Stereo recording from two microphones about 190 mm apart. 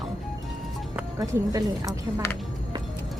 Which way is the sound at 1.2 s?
20° right (ahead or behind).